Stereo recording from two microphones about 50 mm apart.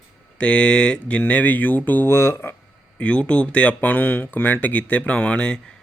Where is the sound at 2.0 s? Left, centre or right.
Left.